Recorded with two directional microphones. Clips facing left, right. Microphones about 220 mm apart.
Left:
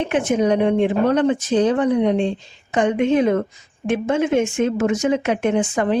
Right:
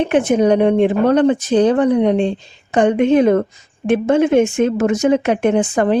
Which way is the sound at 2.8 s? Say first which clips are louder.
Right 5 dB; 60° right (ahead or behind).